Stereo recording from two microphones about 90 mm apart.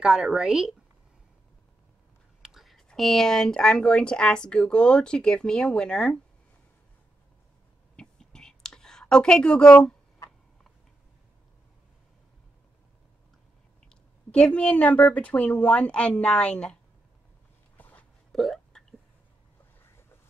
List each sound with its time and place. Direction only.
0.0 s speech: 10° right (ahead or behind)
2.4 s whispering: centre (ahead or behind)
2.9 s speech: 5° left (ahead or behind)
7.9 s whispering: 10° left (ahead or behind)
13.8 s speech: 15° left (ahead or behind)
17.7 s a sound: 20° left (ahead or behind)
18.3 s hiccup: 5° left (ahead or behind)